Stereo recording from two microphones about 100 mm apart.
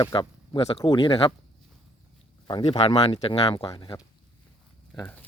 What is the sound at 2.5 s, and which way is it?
Speech, 45° left (ahead or behind).